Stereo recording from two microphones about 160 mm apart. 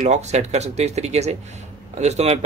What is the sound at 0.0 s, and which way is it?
Speech, 45° right (ahead or behind).